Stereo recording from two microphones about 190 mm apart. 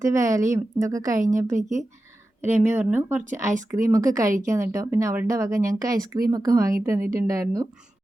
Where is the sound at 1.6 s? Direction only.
40° right (ahead or behind).